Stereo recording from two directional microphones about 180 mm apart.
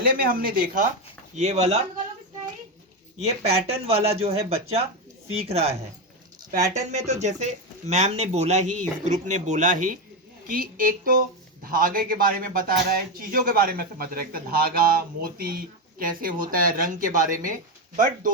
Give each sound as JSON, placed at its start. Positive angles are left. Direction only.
{"t": 0.3, "sound": "speech", "side_deg": -50}
{"t": 1.4, "sound": "speech", "side_deg": -40}
{"t": 3.2, "sound": "speech", "side_deg": -35}